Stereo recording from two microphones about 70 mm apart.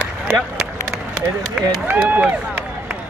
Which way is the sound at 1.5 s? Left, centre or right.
Right.